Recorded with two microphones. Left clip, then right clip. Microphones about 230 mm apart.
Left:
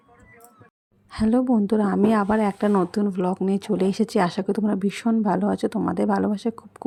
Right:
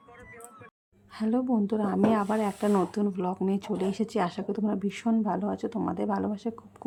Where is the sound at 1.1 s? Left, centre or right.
Left.